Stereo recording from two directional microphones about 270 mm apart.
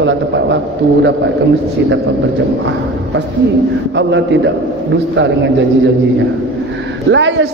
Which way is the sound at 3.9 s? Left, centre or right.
Right.